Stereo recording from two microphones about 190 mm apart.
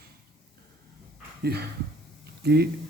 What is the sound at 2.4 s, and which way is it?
Speech, 55° right (ahead or behind).